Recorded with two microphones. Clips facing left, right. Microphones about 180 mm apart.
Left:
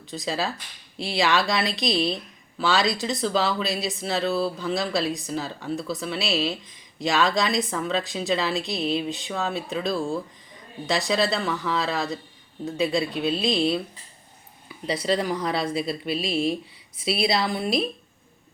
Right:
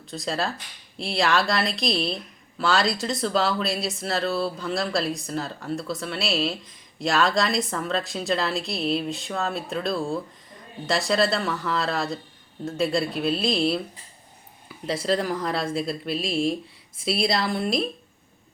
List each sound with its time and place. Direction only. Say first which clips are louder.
0.0 s speech: even; centre (ahead or behind)